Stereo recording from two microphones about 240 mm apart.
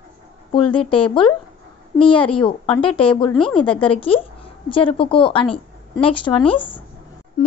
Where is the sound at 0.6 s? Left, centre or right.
Left.